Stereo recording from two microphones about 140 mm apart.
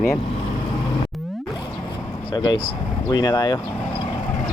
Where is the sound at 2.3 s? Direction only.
30° left (ahead or behind).